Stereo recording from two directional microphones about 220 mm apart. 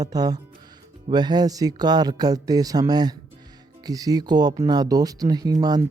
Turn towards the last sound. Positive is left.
turn(degrees=-15)  # may be behind; listen again after turning